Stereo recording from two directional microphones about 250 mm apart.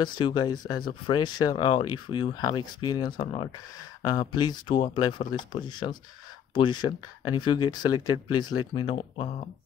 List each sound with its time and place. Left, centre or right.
0.0 s speech: centre